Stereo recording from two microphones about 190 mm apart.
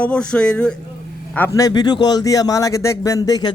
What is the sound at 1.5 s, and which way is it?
Speech, 20° left (ahead or behind).